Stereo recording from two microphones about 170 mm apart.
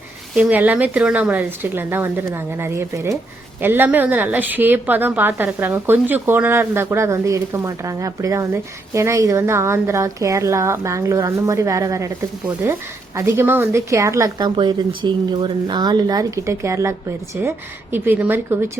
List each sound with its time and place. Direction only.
0.3 s a woman's voice: 10° right (ahead or behind)
17.9 s a woman's voice: 10° right (ahead or behind)